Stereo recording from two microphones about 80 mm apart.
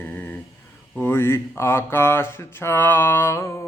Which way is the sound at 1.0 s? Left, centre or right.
Left.